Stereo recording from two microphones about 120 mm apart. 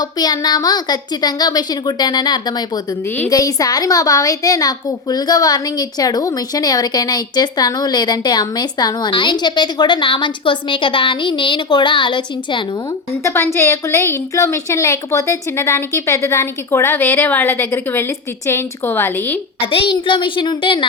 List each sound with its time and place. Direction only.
0.0 s a woman's voice: 35° left (ahead or behind)
13.2 s a woman's voice: 20° left (ahead or behind)
19.7 s a woman's voice: 45° left (ahead or behind)